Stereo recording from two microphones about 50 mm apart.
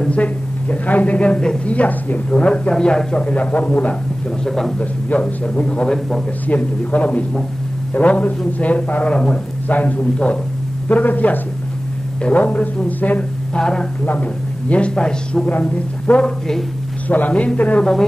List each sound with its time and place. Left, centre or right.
0.1 s a woman's voice: left
1.7 s a woman's voice: left
2.7 s speech: centre
3.3 s a woman's voice: left
4.5 s speech: centre
4.7 s a woman's voice: left
12.4 s a woman's voice: left
12.8 s speech: left
13.6 s speech: centre
14.0 s speech: left
15.0 s speech: centre
15.4 s a woman's voice: left